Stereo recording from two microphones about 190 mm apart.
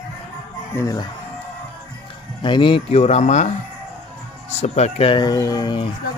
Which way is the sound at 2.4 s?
25° left (ahead or behind).